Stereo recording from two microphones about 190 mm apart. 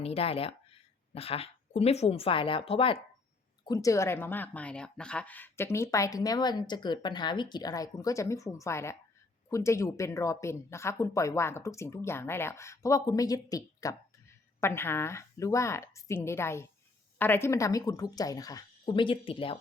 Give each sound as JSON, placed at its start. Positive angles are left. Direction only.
{"t": 0.0, "sound": "a woman's voice", "side_deg": 30}